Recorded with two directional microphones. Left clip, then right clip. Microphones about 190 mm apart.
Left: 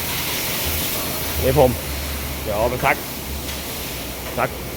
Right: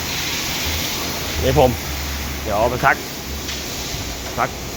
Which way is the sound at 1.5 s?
Centre (ahead or behind).